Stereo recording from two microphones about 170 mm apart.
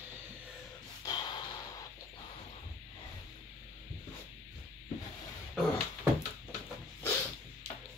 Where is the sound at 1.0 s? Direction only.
20° left (ahead or behind).